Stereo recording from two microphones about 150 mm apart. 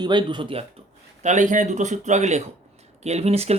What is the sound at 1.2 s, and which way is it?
A man's voice, 55° right (ahead or behind).